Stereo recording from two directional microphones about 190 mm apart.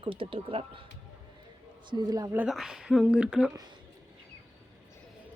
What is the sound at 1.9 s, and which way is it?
Speech, 20° right (ahead or behind).